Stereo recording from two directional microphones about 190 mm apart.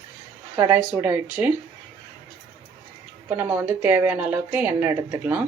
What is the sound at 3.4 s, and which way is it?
Speech, 10° right (ahead or behind).